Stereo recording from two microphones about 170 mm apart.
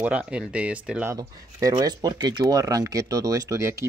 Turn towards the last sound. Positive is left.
turn(degrees=-15)  # may be behind; listen again after turning